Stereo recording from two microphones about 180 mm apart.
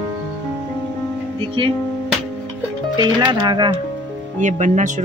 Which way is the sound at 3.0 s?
25° right (ahead or behind).